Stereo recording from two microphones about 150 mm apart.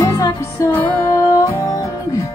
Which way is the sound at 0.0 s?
20° left (ahead or behind).